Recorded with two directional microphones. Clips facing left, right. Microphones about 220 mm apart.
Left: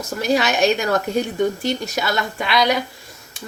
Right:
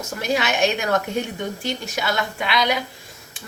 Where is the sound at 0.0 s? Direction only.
35° left (ahead or behind).